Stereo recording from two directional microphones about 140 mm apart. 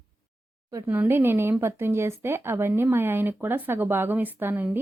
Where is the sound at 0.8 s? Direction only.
15° right (ahead or behind).